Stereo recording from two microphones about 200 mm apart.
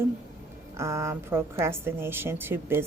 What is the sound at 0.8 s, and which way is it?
A woman's voice, 15° right (ahead or behind).